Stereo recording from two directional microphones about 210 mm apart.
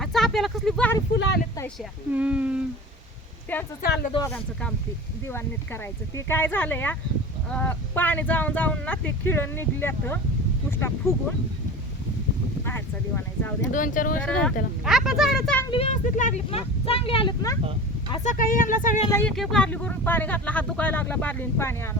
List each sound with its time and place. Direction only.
0.0 s vehicle: centre (ahead or behind)
1.8 s speech: 5° right (ahead or behind)
3.5 s speech: 10° left (ahead or behind)
3.8 s speech: 45° left (ahead or behind)
5.2 s speech: 10° left (ahead or behind)
12.6 s speech: 10° left (ahead or behind)
13.7 s speech: 40° left (ahead or behind)
14.2 s speech: 5° left (ahead or behind)
15.7 s speech: 30° left (ahead or behind)
18.1 s speech: 35° left (ahead or behind)
19.1 s speech: 5° left (ahead or behind)